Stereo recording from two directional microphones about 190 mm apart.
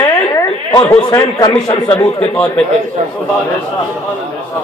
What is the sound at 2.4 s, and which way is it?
Speech, 5° left (ahead or behind).